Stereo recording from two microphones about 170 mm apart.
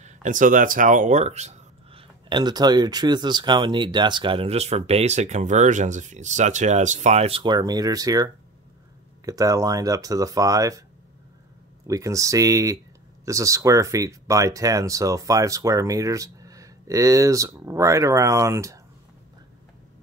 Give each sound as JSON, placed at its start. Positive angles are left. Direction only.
{"t": 0.0, "sound": "speech", "side_deg": -50}
{"t": 2.2, "sound": "speech", "side_deg": -25}
{"t": 11.9, "sound": "speech", "side_deg": -20}